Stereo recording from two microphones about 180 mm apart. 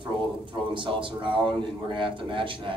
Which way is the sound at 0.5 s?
30° right (ahead or behind).